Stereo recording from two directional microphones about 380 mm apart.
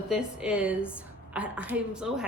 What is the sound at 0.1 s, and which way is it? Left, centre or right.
Speech, centre.